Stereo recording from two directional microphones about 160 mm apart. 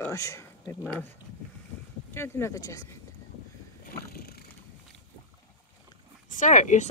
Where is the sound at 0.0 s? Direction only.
20° left (ahead or behind).